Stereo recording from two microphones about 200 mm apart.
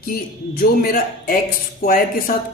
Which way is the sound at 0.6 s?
50° left (ahead or behind).